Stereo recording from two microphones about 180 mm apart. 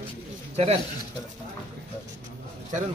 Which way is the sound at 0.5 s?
35° right (ahead or behind).